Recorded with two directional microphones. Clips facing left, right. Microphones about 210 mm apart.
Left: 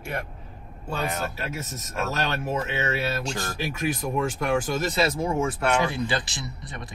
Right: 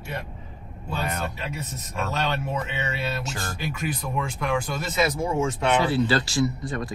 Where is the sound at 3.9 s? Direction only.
45° left (ahead or behind).